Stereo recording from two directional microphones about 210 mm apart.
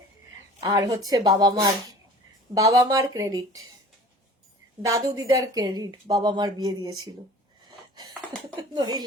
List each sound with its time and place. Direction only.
0.6 s speech: 15° right (ahead or behind)
4.8 s speech: 15° right (ahead or behind)
8.7 s speech: 20° right (ahead or behind)